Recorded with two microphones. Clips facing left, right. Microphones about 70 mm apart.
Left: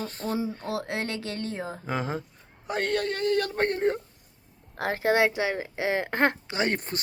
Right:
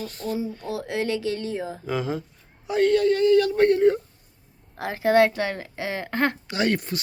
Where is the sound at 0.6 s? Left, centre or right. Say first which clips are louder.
Right 3 dB; left.